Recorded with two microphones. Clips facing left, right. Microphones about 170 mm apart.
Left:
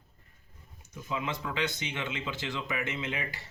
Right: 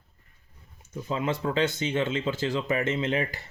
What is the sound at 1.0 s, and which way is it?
Speech, 40° right (ahead or behind).